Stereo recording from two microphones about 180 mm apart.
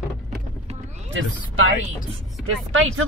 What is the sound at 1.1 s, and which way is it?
Speech, 90° right.